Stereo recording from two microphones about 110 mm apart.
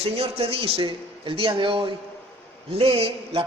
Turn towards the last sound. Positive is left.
turn(degrees=-60)  # may be behind; listen again after turning